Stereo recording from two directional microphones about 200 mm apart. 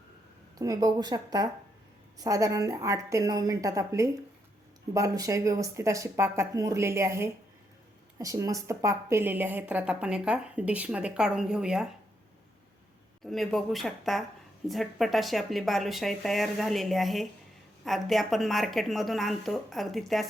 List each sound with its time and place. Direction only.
0.6 s a woman's voice: 15° right (ahead or behind)
13.2 s speech: centre (ahead or behind)